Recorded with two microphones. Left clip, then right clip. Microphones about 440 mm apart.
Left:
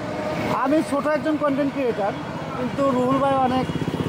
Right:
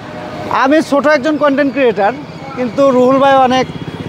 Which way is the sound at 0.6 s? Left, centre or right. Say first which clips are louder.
Right 13 dB; right.